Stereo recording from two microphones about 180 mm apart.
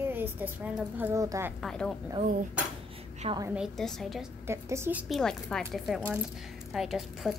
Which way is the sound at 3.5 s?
Centre (ahead or behind).